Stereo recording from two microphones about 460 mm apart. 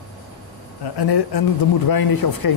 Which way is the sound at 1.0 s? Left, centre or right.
Left.